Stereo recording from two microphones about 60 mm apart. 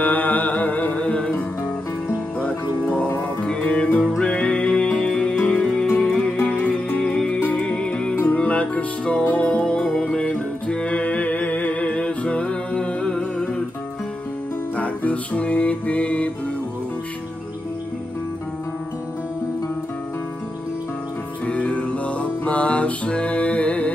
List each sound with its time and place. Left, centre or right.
0.0 s music: left
3.4 s music: centre
14.8 s music: left
21.5 s music: left